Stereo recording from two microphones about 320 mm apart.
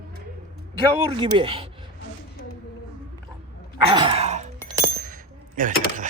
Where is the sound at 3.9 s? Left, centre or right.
Centre.